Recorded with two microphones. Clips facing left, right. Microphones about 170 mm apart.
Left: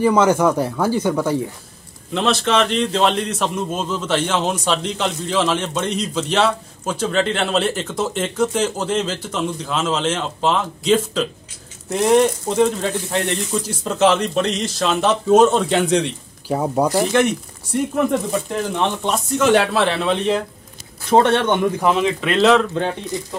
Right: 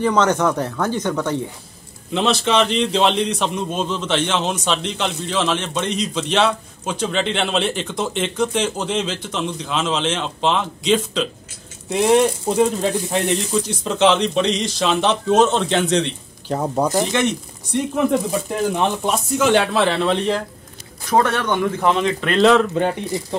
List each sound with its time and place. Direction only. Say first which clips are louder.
0.0 s a man's voice: left 2 dB; 10° left (ahead or behind)
11.9 s speech: even; 5° right (ahead or behind)
13.5 s a man's voice: right 2 dB; 5° left (ahead or behind)
21.1 s speech: left 3 dB; 25° left (ahead or behind)
21.6 s a man's voice: left 1 dB; 10° left (ahead or behind)